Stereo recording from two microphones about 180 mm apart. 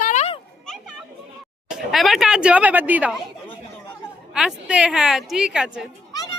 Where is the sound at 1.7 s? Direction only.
Centre (ahead or behind).